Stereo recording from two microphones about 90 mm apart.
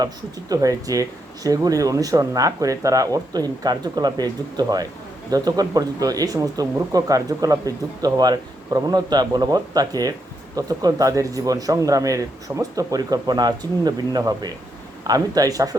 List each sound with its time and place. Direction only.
0.0 s speech: 40° right (ahead or behind)